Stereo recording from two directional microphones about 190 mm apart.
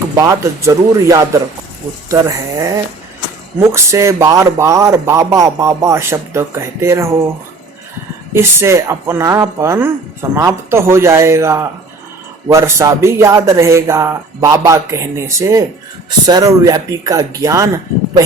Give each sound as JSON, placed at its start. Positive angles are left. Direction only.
{"t": 0.2, "sound": "speech", "side_deg": -15}
{"t": 8.3, "sound": "speech", "side_deg": -15}